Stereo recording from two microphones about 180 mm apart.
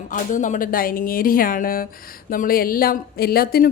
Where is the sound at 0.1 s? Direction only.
45° left (ahead or behind).